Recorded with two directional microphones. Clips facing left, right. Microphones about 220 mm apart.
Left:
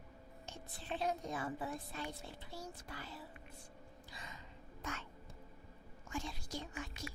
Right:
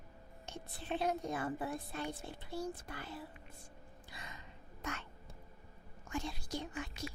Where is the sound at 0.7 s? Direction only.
55° right (ahead or behind).